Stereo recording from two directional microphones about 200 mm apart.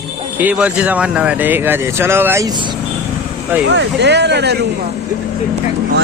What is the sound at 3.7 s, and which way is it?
Speech, 60° right (ahead or behind).